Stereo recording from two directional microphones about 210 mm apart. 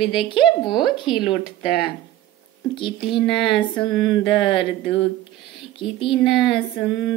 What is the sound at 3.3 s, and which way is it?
A woman's voice, centre (ahead or behind).